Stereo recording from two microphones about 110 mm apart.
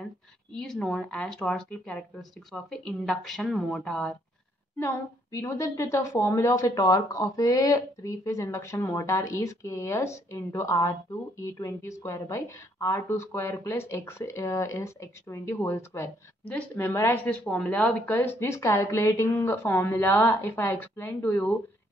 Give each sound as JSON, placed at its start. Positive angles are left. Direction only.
{"t": 0.6, "sound": "speech", "side_deg": 5}
{"t": 4.7, "sound": "a woman's voice", "side_deg": 25}